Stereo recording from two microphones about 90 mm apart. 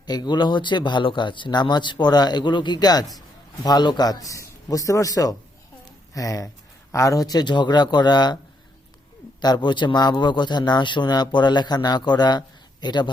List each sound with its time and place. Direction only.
0.0 s a man's voice: 50° left (ahead or behind)
5.8 s a sound: 40° left (ahead or behind)
6.9 s speech: 35° left (ahead or behind); by 8.4 s 50° left (ahead or behind)
9.4 s a man's voice: 55° left (ahead or behind)